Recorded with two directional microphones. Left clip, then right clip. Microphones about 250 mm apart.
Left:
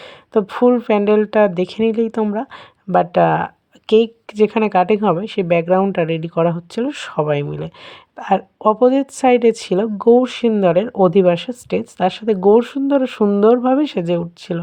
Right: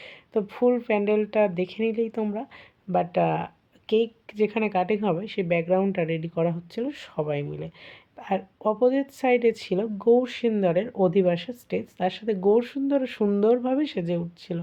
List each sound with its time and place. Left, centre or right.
0.0 s speech: left